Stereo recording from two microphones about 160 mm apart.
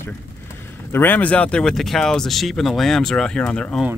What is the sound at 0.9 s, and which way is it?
Speech, 10° left (ahead or behind).